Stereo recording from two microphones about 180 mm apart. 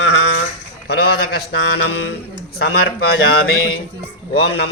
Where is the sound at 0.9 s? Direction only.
60° left (ahead or behind).